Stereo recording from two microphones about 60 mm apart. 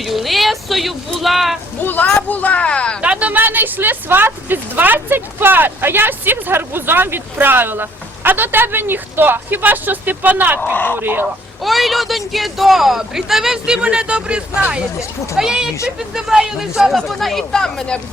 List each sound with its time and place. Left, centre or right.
0.0 s speech: centre
1.8 s speech: left
3.0 s speech: right
11.6 s speech: centre
17.1 s speech: centre